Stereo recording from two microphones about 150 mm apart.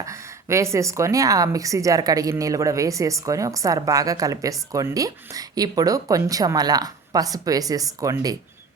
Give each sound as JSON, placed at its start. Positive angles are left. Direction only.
{"t": 0.0, "sound": "a woman's voice", "side_deg": -20}